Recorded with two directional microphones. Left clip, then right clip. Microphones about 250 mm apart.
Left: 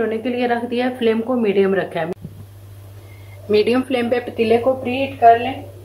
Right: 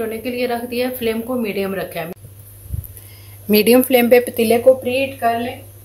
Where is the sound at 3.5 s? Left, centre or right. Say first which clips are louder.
Right 4 dB; right.